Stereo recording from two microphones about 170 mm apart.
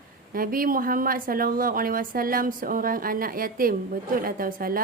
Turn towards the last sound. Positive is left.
turn(degrees=-55)  # may be behind; listen again after turning